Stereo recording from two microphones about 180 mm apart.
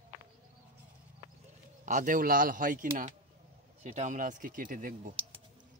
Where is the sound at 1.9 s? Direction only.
45° right (ahead or behind).